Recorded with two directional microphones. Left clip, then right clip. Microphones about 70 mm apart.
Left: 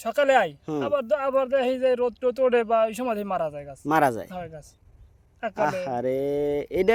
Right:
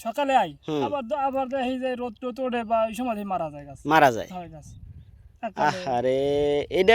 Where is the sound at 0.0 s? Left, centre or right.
Left.